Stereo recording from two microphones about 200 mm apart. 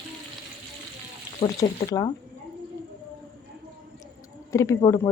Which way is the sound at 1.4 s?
20° left (ahead or behind).